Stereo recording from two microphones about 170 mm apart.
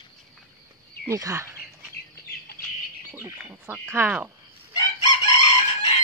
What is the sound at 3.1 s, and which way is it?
Speech, 10° right (ahead or behind).